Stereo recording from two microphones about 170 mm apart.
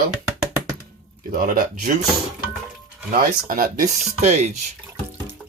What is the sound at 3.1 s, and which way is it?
Speech, 55° right (ahead or behind).